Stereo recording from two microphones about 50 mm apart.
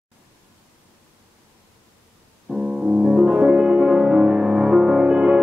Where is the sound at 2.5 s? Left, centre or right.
Centre.